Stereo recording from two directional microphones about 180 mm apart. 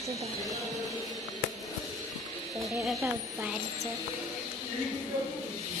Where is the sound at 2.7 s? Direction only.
Centre (ahead or behind).